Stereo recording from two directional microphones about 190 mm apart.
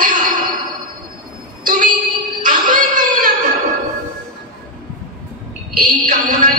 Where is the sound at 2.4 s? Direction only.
45° right (ahead or behind).